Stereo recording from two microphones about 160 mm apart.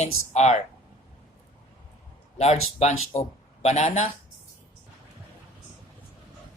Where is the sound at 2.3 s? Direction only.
45° left (ahead or behind).